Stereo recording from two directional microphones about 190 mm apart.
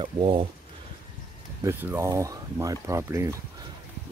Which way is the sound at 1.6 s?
10° right (ahead or behind).